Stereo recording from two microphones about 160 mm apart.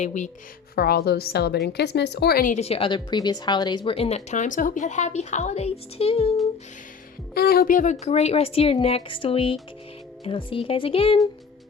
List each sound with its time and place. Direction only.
0.0 s speech: 50° left (ahead or behind)
0.8 s a woman's voice: 75° left (ahead or behind)
2.6 s speech: 40° left (ahead or behind)
7.3 s speech: 70° left (ahead or behind); by 11.2 s 35° left (ahead or behind)